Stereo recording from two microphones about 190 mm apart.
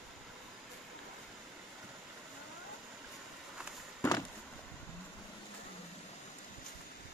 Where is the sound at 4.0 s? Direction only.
20° left (ahead or behind).